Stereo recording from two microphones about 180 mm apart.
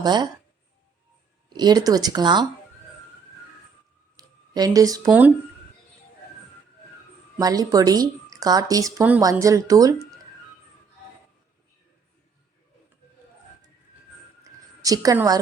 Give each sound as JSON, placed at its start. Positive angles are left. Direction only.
{"t": 0.0, "sound": "speech", "side_deg": -25}
{"t": 1.5, "sound": "speech", "side_deg": -20}
{"t": 4.2, "sound": "a sound", "side_deg": -20}
{"t": 7.3, "sound": "speech", "side_deg": -20}
{"t": 14.4, "sound": "music", "side_deg": -20}